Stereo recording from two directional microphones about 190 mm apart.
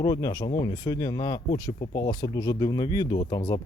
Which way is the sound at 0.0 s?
20° left (ahead or behind).